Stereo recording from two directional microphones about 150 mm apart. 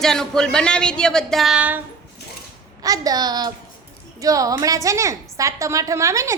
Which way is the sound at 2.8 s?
25° right (ahead or behind).